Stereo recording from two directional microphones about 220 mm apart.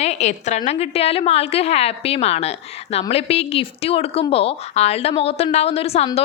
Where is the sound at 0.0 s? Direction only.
30° left (ahead or behind).